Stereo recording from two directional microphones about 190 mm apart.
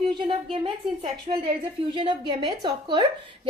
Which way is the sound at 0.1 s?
25° right (ahead or behind).